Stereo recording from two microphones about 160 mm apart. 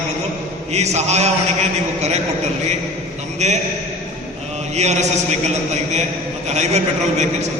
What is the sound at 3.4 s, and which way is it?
Speech, 45° right (ahead or behind).